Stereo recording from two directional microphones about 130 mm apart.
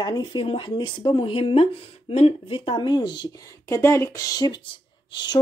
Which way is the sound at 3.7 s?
20° left (ahead or behind).